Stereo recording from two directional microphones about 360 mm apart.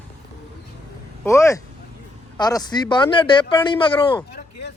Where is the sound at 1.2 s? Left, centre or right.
Centre.